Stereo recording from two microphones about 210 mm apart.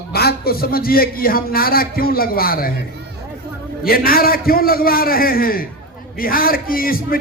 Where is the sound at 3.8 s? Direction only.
45° left (ahead or behind).